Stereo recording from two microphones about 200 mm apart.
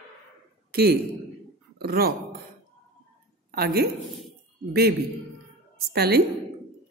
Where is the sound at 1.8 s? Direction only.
50° right (ahead or behind).